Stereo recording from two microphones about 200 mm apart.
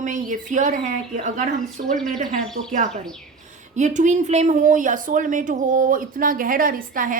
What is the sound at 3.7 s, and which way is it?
Speech, 35° right (ahead or behind).